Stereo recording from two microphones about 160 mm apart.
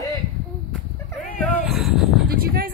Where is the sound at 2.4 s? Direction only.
65° right (ahead or behind).